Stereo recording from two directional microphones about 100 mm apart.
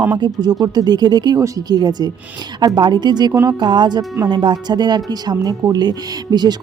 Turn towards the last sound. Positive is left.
turn(degrees=-45)  # may be behind; listen again after turning